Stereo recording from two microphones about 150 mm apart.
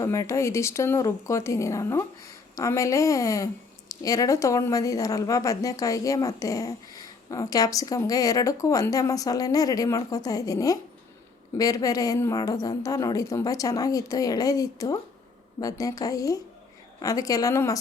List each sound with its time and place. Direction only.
0.0 s speech: 20° left (ahead or behind)